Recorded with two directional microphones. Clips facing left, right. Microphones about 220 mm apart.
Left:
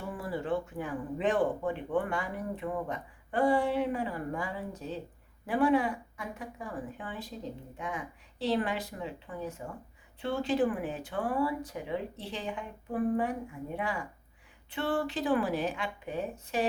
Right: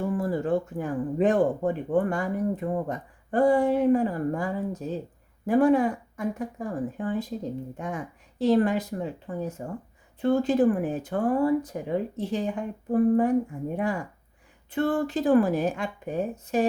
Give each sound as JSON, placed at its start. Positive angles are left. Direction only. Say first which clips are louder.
{"t": 0.0, "sound": "speech", "louder": "right 9 dB", "side_deg": -45}